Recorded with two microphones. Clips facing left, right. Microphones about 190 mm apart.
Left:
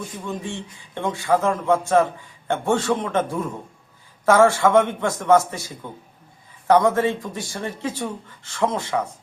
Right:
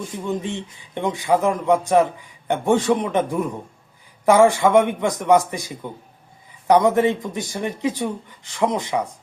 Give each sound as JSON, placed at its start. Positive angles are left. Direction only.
{"t": 0.3, "sound": "speech", "side_deg": -20}